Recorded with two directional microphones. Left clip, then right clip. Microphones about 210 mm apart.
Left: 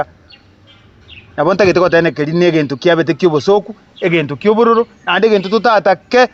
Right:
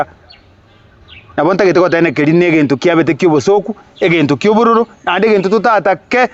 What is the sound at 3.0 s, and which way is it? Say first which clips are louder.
Speech: right 1 dB; 55° right (ahead or behind).